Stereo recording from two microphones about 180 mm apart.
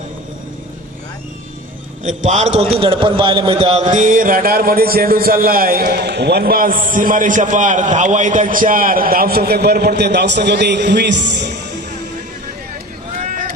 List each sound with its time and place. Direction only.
2.0 s a man's voice: 40° right (ahead or behind); by 11.5 s 75° right (ahead or behind)
13.1 s vehicle: 45° right (ahead or behind)